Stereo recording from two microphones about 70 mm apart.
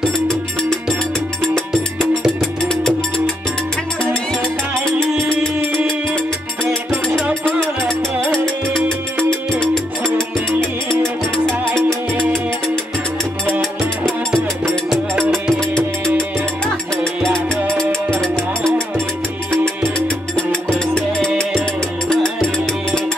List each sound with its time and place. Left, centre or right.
0.3 s music: centre
1.7 s music: centre
2.6 s music: centre
4.8 s music: centre
8.3 s music: centre
15.1 s music: right
16.9 s music: centre
20.3 s music: centre